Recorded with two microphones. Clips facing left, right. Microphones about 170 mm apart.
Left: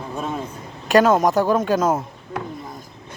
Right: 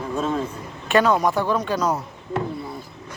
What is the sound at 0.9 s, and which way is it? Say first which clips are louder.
Speech: left 3 dB; 40° left (ahead or behind).